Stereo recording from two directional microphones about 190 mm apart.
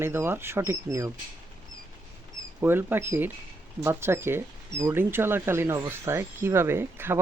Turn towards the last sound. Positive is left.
turn(degrees=-10)  # may be behind; listen again after turning